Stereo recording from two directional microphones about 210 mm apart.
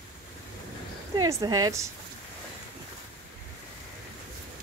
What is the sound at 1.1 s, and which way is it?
Speech, 15° right (ahead or behind).